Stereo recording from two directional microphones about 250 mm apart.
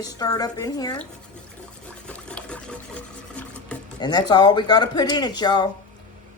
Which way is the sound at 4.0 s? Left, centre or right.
Centre.